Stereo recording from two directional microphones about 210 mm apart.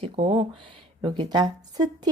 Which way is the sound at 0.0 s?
25° right (ahead or behind).